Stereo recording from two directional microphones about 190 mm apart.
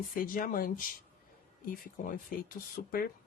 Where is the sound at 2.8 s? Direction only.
55° left (ahead or behind).